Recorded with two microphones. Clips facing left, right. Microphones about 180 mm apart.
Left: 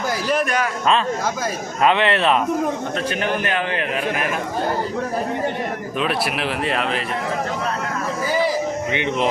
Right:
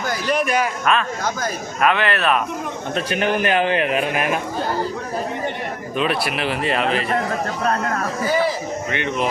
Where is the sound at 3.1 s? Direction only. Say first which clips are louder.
Right 6 dB; 15° right (ahead or behind).